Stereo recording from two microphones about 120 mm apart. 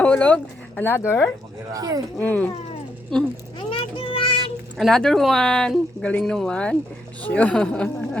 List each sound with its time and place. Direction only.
0.0 s speech: 10° left (ahead or behind)
1.7 s speech: 35° right (ahead or behind)
2.1 s a woman's voice: 15° left (ahead or behind)
3.1 s speech: 5° left (ahead or behind)
3.7 s child singing: 45° left (ahead or behind)
4.8 s a woman's voice: 5° left (ahead or behind)